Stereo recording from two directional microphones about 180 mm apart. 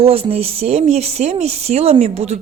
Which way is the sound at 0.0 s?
30° right (ahead or behind).